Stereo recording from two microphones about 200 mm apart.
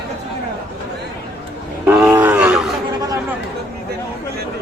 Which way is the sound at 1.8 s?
5° right (ahead or behind).